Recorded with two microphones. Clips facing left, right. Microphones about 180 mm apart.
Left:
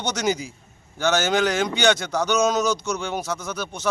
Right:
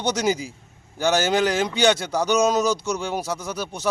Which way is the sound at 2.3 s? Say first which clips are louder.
Right 1 dB; 35° right (ahead or behind).